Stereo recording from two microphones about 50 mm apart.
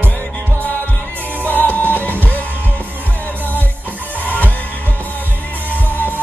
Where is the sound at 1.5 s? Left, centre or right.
Left.